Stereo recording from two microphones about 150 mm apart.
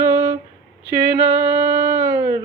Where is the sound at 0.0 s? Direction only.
15° right (ahead or behind).